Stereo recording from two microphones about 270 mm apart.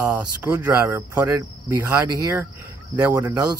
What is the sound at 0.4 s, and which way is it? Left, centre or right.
Speech, centre.